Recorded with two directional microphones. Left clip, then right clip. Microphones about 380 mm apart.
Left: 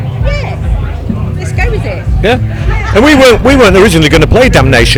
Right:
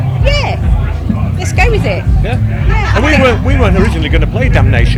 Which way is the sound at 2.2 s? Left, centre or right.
Left.